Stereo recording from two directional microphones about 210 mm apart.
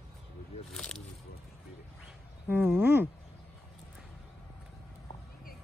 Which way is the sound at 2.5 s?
5° right (ahead or behind).